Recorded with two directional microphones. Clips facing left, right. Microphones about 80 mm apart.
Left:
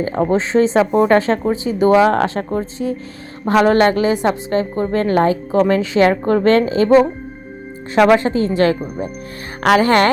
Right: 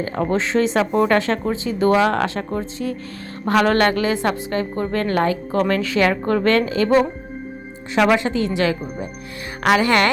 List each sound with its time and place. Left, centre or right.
0.0 s a woman's voice: left
2.1 s speech: left
3.4 s a woman's voice: left
7.9 s speech: left